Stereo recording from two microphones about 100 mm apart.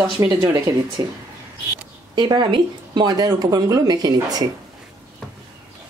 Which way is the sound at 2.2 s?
50° right (ahead or behind).